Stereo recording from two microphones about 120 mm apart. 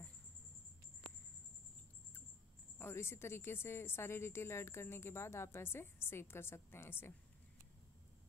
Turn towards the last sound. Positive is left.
turn(degrees=20)  # may be behind; listen again after turning